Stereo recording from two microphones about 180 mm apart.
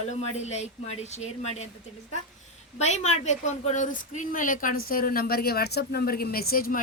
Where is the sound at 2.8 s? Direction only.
40° left (ahead or behind).